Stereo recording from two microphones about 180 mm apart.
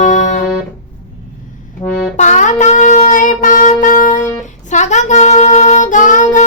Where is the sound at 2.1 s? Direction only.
40° left (ahead or behind).